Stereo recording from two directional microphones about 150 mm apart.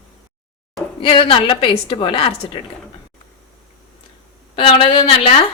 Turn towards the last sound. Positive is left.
turn(degrees=35)  # may be behind; listen again after turning